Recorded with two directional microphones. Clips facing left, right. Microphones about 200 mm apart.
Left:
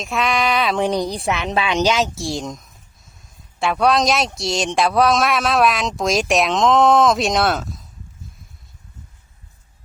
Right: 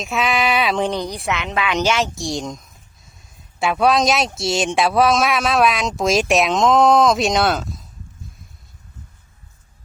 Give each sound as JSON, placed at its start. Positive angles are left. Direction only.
{"t": 0.0, "sound": "speech", "side_deg": 0}
{"t": 0.8, "sound": "speech", "side_deg": 15}
{"t": 1.1, "sound": "a woman's voice", "side_deg": 30}
{"t": 1.8, "sound": "speech", "side_deg": 10}